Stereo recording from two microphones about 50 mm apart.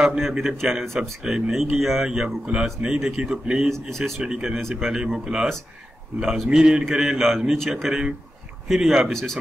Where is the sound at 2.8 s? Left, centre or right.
Centre.